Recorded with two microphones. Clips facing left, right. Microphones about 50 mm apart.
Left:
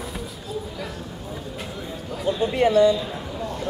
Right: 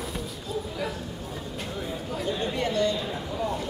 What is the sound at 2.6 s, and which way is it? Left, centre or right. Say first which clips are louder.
Speech: left 12 dB; left.